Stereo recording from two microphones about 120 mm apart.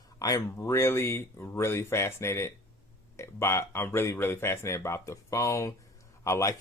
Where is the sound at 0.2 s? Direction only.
25° left (ahead or behind).